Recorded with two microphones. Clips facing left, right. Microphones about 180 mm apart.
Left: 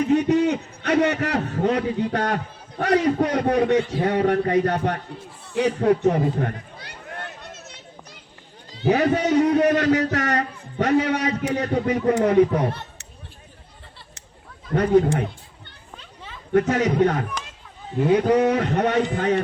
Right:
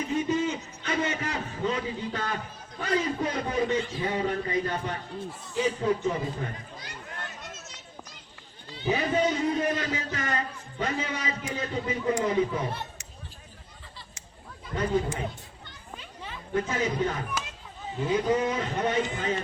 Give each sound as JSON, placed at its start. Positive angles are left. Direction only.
{"t": 0.0, "sound": "a man's voice", "side_deg": 70}
{"t": 5.5, "sound": "a sound", "side_deg": 70}
{"t": 8.9, "sound": "a man's voice", "side_deg": 70}
{"t": 14.7, "sound": "a man's voice", "side_deg": 60}
{"t": 16.5, "sound": "a man's voice", "side_deg": 70}